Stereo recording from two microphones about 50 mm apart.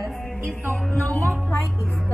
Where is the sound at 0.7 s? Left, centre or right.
Left.